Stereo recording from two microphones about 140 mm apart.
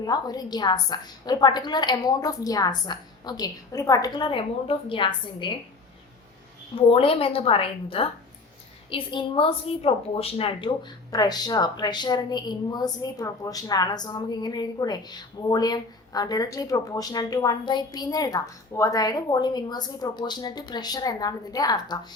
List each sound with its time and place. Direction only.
0.0 s a woman's voice: 30° left (ahead or behind)
6.9 s a woman's voice: 40° left (ahead or behind)